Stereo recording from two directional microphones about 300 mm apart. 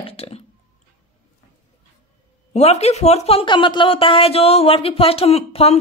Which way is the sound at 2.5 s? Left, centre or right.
Left.